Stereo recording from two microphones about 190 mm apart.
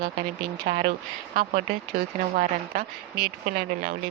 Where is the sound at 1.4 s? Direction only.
55° right (ahead or behind).